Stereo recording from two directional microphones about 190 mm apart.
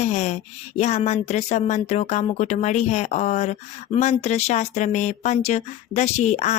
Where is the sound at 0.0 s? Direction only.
35° left (ahead or behind).